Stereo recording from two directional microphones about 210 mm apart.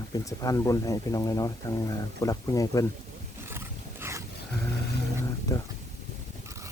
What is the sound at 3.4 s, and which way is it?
Wild animals, 10° right (ahead or behind).